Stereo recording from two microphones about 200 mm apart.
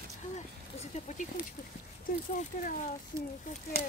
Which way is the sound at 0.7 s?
35° left (ahead or behind).